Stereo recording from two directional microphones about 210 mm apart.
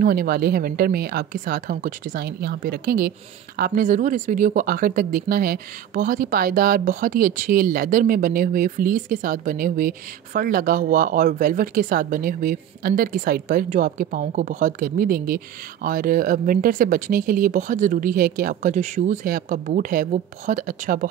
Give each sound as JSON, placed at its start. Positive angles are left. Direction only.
{"t": 0.0, "sound": "speech", "side_deg": -45}